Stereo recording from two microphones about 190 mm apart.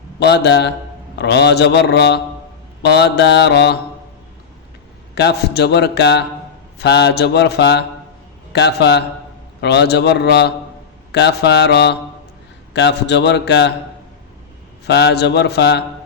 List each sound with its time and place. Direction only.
0.2 s a man's voice: 60° left (ahead or behind)
5.1 s a man's voice: 60° left (ahead or behind)
14.8 s a man's voice: 60° left (ahead or behind)